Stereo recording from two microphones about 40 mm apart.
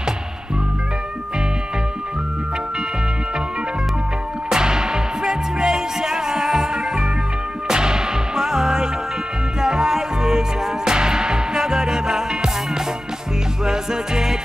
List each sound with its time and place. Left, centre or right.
4.5 s music: centre